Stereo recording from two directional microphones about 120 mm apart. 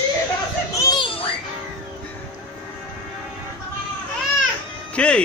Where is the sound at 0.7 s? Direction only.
35° left (ahead or behind).